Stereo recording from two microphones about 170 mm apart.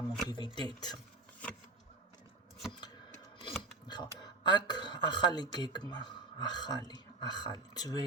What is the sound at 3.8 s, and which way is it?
Speech, 25° left (ahead or behind).